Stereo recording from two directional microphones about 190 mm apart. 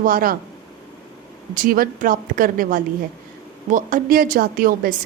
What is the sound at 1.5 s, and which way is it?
A woman's voice, 45° right (ahead or behind).